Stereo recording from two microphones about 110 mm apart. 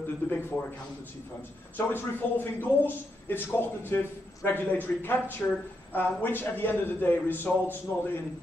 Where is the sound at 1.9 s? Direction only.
20° left (ahead or behind).